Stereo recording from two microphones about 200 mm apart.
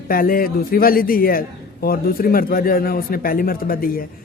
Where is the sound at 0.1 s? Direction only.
45° left (ahead or behind).